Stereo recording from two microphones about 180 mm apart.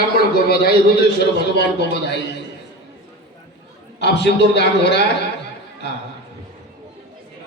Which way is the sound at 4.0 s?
70° left (ahead or behind).